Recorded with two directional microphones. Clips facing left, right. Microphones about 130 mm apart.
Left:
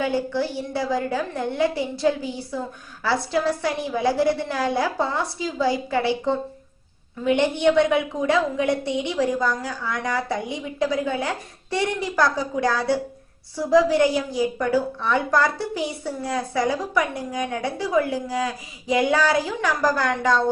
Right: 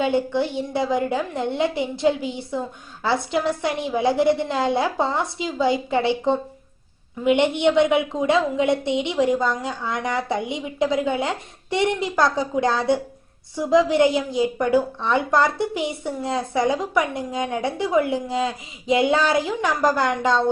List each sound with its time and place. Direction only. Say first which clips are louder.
0.0 s a woman's voice: right 2 dB; 20° right (ahead or behind)